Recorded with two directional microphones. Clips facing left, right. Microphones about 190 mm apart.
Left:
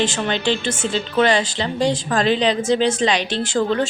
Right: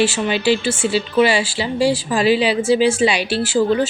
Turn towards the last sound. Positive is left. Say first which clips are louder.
# right 3 dB
turn(degrees=-5)  # may be behind; listen again after turning